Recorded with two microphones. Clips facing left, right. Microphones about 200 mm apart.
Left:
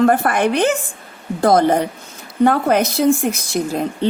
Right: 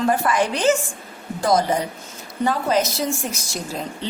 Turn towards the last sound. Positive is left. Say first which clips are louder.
# left 9 dB
turn(degrees=60)  # may be behind; listen again after turning